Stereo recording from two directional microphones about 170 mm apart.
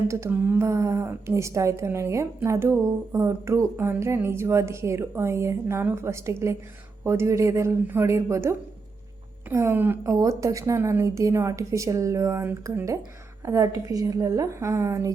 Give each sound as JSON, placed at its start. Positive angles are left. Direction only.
{"t": 0.1, "sound": "a woman's voice", "side_deg": -15}